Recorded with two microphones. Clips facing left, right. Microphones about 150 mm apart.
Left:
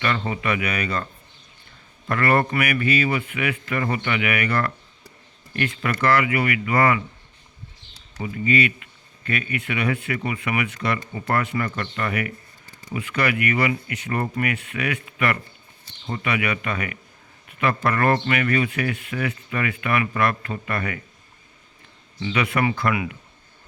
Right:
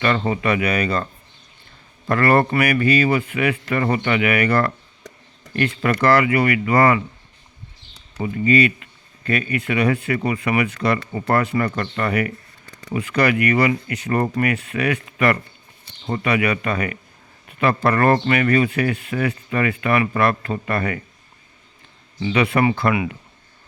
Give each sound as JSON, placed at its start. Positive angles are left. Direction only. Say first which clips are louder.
{"t": 0.0, "sound": "speech", "louder": "right 5 dB", "side_deg": -35}
{"t": 2.0, "sound": "speech", "louder": "right 4 dB", "side_deg": -35}
{"t": 8.2, "sound": "speech", "louder": "right 5 dB", "side_deg": -35}
{"t": 22.2, "sound": "speech", "louder": "right 5 dB", "side_deg": -30}